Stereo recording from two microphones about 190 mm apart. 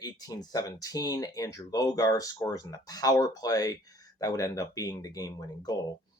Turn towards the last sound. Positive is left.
turn(degrees=20)  # may be behind; listen again after turning